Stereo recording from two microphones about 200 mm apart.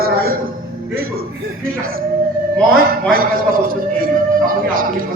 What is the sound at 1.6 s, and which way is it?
Speech, 45° right (ahead or behind).